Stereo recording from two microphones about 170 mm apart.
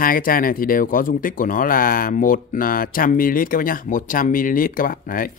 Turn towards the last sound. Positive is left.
turn(degrees=55)  # may be behind; listen again after turning